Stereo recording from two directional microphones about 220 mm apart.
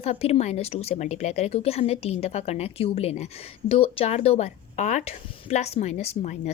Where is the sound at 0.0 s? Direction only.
30° left (ahead or behind).